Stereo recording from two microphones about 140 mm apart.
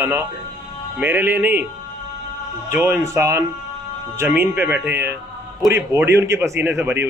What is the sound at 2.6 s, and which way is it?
A man's voice, 15° right (ahead or behind).